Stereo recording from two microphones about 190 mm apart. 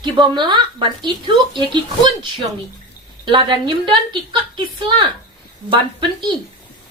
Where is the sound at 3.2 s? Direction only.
25° right (ahead or behind).